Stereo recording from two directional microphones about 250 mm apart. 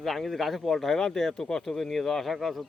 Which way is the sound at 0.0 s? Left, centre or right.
Centre.